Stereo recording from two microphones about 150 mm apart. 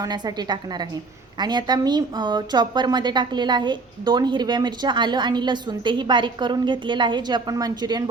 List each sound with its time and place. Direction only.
0.0 s a woman's voice: 25° right (ahead or behind)